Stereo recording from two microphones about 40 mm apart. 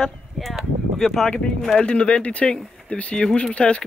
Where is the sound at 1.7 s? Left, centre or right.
Left.